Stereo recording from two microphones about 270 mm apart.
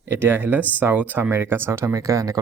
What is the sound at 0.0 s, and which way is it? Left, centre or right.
Speech, centre.